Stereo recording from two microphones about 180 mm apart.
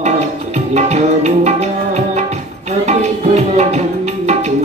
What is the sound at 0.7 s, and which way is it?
Tabla, 35° right (ahead or behind).